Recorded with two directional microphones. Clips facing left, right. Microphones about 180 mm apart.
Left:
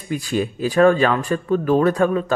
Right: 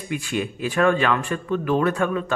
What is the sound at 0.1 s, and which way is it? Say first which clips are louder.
Speech: left 4 dB; 35° left (ahead or behind).